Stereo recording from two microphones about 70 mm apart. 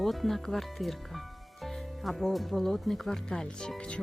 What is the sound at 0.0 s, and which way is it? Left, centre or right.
Speech, centre.